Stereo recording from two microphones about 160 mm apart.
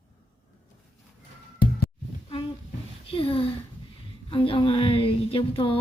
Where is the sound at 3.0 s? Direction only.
35° left (ahead or behind).